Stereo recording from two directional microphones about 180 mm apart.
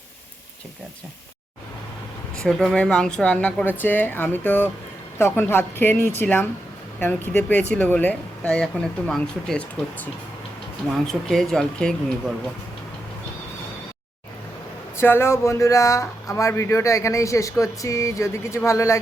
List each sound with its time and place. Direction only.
2.3 s speech: centre (ahead or behind)
14.9 s speech: 15° left (ahead or behind)